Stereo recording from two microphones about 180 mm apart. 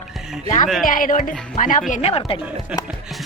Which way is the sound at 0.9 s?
50° left (ahead or behind).